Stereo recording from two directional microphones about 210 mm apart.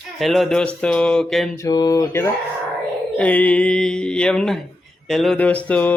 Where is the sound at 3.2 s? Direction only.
5° left (ahead or behind).